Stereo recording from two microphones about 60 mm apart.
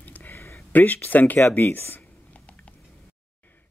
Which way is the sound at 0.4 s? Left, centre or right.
Left.